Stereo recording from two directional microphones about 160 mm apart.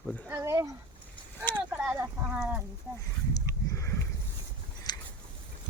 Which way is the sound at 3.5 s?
20° left (ahead or behind).